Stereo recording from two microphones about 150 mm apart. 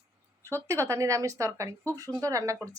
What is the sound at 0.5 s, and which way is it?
Speech, 20° right (ahead or behind).